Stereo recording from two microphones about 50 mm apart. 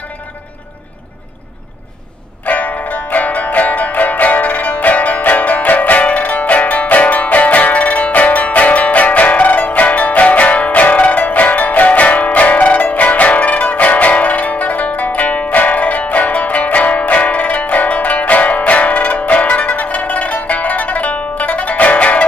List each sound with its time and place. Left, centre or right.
2.4 s music: left